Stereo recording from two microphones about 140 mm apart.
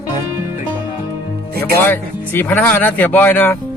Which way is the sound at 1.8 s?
15° left (ahead or behind).